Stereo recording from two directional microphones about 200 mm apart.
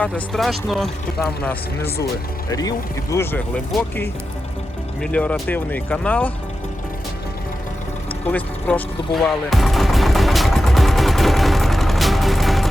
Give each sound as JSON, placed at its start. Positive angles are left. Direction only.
{"t": 0.0, "sound": "speech", "side_deg": 0}
{"t": 5.1, "sound": "speech", "side_deg": 5}
{"t": 8.3, "sound": "speech", "side_deg": 5}
{"t": 9.2, "sound": "music", "side_deg": 0}